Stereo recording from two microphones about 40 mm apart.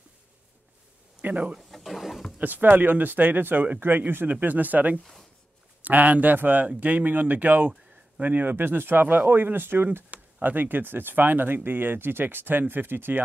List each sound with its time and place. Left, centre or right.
1.2 s speech: right
1.6 s pigeon: centre
2.3 s speech: right
3.8 s speech: right
4.3 s a man's voice: right
10.1 s speech: right